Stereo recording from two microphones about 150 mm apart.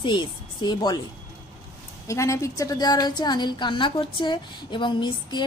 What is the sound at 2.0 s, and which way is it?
A woman's voice, 20° left (ahead or behind).